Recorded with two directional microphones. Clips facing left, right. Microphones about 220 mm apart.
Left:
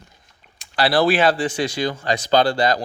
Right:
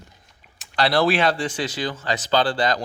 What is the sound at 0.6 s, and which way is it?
Speech, 5° left (ahead or behind).